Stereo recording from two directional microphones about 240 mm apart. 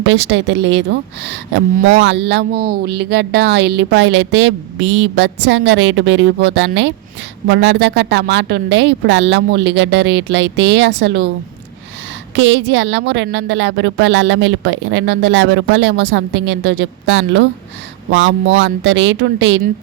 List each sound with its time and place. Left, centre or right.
0.0 s speech: right
12.4 s speech: right